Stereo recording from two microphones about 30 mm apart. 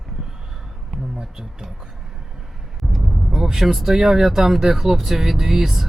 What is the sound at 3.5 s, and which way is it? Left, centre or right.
Speech, centre.